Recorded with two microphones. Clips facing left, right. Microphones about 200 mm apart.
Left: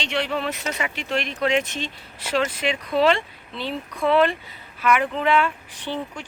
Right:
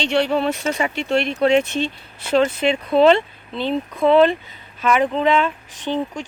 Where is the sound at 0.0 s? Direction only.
35° right (ahead or behind).